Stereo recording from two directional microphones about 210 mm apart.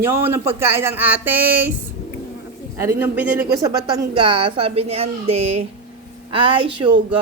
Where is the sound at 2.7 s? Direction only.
10° right (ahead or behind).